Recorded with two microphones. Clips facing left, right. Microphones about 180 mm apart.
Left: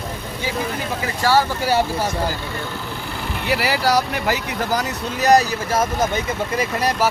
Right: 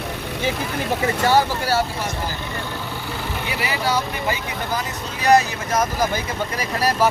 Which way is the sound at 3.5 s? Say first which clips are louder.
Left 5 dB; 70° left (ahead or behind).